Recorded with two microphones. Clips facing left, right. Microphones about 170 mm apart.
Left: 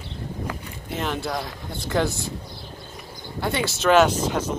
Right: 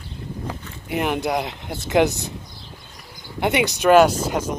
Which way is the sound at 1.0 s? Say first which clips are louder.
Right 5 dB; 15° right (ahead or behind).